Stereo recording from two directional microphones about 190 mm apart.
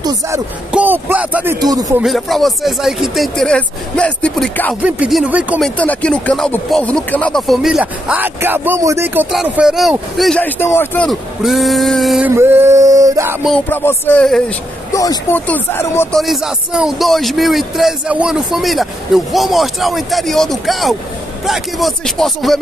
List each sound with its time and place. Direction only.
0.0 s speech: 20° right (ahead or behind)
0.7 s speech: 5° right (ahead or behind)
2.0 s speech: centre (ahead or behind)
4.8 s speech: 5° right (ahead or behind)
5.8 s speech: 5° left (ahead or behind)
11.1 s speech: centre (ahead or behind)
12.4 s male singing: 10° right (ahead or behind)
13.5 s speech: 10° left (ahead or behind)
14.9 s speech: 15° left (ahead or behind)
16.2 s speech: centre (ahead or behind)